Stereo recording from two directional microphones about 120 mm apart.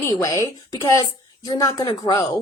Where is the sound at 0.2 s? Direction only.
25° left (ahead or behind).